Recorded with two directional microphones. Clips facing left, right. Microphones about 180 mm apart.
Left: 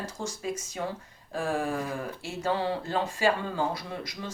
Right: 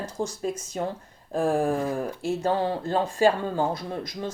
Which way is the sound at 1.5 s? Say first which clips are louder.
Right 6 dB; 40° right (ahead or behind).